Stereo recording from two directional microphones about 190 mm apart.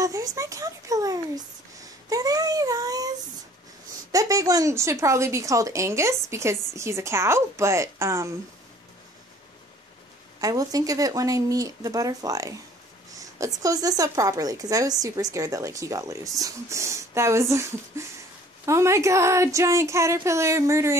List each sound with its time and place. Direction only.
0.0 s a woman's voice: 15° right (ahead or behind)
4.1 s a woman's voice: 20° right (ahead or behind)
10.4 s speech: 20° right (ahead or behind)
13.1 s a sound: 20° right (ahead or behind)
13.6 s a woman's voice: 20° right (ahead or behind)